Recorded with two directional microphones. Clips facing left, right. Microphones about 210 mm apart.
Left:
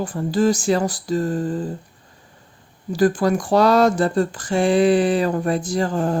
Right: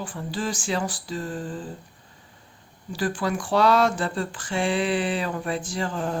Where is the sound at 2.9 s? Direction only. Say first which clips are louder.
Left 9 dB; 45° left (ahead or behind).